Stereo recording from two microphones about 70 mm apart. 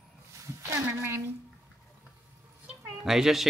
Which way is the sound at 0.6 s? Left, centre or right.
Right.